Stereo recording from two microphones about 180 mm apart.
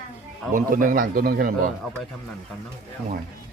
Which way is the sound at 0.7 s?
50° right (ahead or behind).